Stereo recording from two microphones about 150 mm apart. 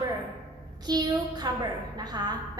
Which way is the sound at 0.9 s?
25° right (ahead or behind).